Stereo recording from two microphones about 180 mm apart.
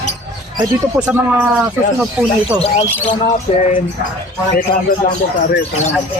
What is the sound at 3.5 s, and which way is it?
Speech, 30° left (ahead or behind).